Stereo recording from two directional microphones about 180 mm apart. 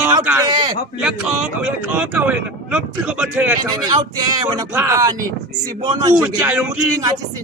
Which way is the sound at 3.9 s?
20° right (ahead or behind).